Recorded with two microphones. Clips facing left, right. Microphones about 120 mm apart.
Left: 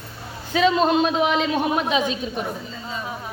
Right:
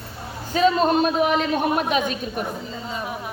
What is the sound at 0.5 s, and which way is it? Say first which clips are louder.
A man's voice: even; 45° right (ahead or behind).